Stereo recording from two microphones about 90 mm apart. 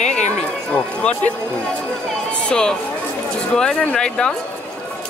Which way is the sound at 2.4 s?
10° left (ahead or behind).